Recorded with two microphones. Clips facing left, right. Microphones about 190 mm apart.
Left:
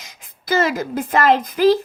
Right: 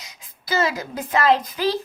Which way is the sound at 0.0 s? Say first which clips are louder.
Left 2 dB; 50° left (ahead or behind).